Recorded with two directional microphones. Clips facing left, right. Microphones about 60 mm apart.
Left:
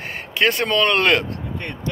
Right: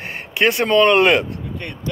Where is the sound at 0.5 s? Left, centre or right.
Centre.